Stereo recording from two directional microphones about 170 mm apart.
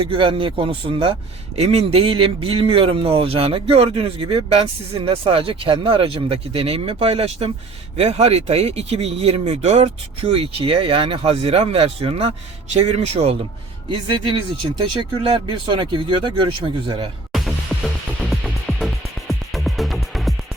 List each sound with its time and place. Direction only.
0.0 s a man's voice: 30° right (ahead or behind)
17.3 s music: centre (ahead or behind)